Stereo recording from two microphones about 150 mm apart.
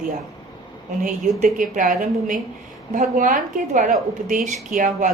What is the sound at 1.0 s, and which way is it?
A woman's voice, 65° right (ahead or behind).